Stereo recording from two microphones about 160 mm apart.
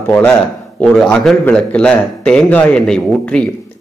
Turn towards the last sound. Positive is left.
turn(degrees=5)  # may be behind; listen again after turning